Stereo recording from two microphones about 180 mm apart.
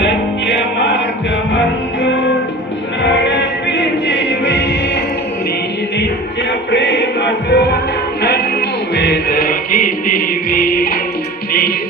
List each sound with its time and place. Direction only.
0.0 s music: 85° left
3.0 s music: 80° left
6.7 s music: 80° left
9.0 s music: 65° left (ahead or behind)